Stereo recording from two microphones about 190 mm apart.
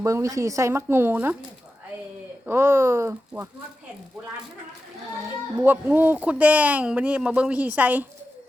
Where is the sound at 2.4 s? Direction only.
10° right (ahead or behind).